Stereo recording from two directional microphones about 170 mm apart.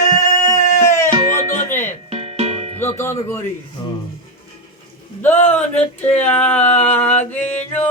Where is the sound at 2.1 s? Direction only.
40° right (ahead or behind).